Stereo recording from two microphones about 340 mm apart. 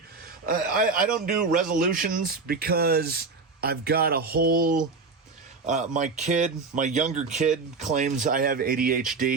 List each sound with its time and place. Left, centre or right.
0.4 s speech: right